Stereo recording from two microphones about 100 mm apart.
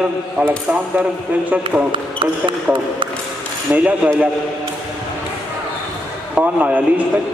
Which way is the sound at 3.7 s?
15° right (ahead or behind).